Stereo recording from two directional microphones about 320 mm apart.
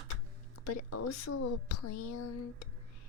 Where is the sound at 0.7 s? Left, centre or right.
Left.